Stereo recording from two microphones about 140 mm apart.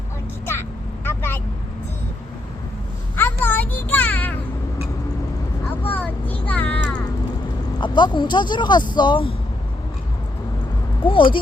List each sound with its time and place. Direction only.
1.0 s vehicle: 15° left (ahead or behind)
3.2 s a sound: 15° left (ahead or behind)
5.9 s vehicle: 10° left (ahead or behind)
6.5 s music: 10° left (ahead or behind)
7.8 s speech: 35° left (ahead or behind)
11.0 s speech: 40° left (ahead or behind)